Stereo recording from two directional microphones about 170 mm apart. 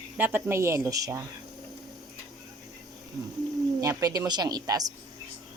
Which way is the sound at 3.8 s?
20° right (ahead or behind).